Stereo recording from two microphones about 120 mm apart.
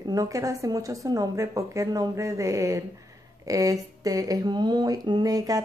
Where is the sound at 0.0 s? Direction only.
30° right (ahead or behind).